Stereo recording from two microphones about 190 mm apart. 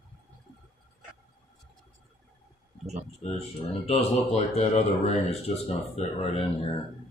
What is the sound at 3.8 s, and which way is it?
Speech, 30° left (ahead or behind).